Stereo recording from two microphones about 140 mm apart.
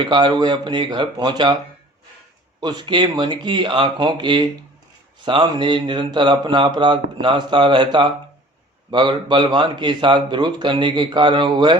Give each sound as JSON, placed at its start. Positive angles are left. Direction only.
{"t": 0.0, "sound": "speech", "side_deg": -35}
{"t": 2.6, "sound": "speech", "side_deg": -30}